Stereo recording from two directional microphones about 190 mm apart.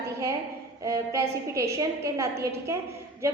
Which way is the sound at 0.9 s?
15° right (ahead or behind).